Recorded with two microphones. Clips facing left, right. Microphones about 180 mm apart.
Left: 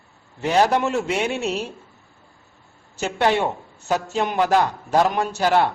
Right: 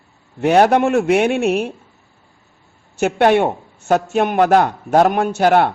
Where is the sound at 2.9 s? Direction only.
55° right (ahead or behind).